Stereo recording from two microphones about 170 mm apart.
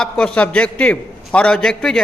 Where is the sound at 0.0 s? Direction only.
5° left (ahead or behind).